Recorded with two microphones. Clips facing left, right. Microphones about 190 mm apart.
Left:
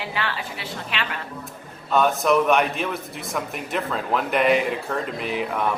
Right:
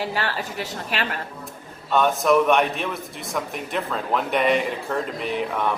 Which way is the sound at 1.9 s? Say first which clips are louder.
Right 1 dB; centre (ahead or behind).